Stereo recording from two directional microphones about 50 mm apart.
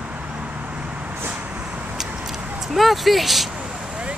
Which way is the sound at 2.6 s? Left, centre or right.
Centre.